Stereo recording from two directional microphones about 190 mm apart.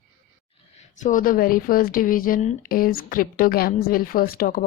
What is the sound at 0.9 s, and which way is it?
A woman's voice, 40° left (ahead or behind).